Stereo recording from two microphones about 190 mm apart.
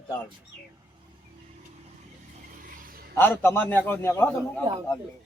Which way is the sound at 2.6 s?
50° right (ahead or behind).